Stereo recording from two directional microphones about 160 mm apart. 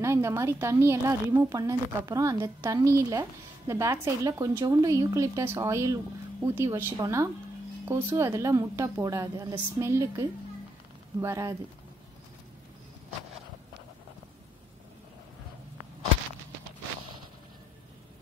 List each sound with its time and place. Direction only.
0.0 s speech: 15° right (ahead or behind)